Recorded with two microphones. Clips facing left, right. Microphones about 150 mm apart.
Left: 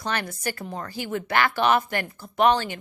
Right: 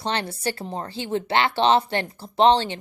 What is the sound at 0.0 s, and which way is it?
Speech, 30° right (ahead or behind).